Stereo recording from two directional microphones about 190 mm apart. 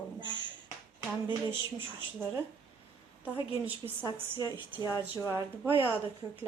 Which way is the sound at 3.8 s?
20° right (ahead or behind).